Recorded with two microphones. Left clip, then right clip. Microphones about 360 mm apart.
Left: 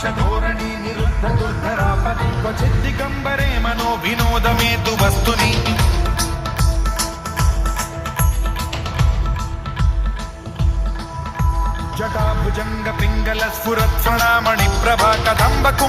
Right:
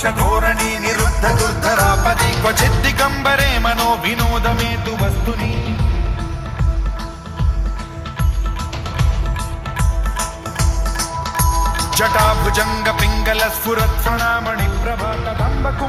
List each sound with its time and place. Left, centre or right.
0.0 s music: centre
1.2 s music: right; by 5.7 s left
6.1 s music: left
11.3 s music: right; by 15.4 s left